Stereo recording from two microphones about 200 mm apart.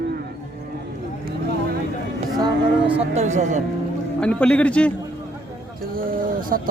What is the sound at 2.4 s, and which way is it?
Speech, 20° right (ahead or behind).